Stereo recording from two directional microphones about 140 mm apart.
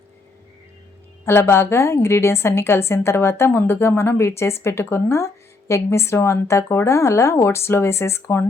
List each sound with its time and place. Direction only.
1.2 s a woman's voice: 15° left (ahead or behind)